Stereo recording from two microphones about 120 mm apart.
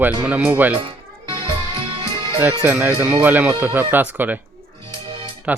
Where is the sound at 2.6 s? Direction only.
15° right (ahead or behind).